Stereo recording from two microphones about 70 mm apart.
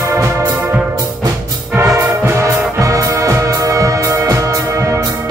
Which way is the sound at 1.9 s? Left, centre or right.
Right.